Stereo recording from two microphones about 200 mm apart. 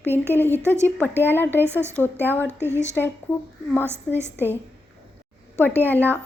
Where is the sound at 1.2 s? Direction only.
10° left (ahead or behind).